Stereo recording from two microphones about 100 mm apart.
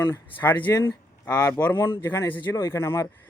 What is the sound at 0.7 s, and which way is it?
A man's voice, 30° left (ahead or behind).